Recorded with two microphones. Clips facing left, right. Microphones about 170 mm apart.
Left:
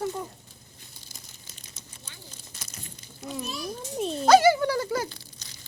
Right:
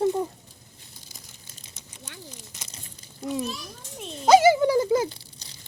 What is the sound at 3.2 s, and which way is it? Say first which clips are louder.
Speech: right 7 dB; 30° right (ahead or behind).